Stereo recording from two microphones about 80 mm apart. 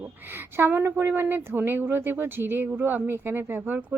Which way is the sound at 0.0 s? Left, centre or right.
Right.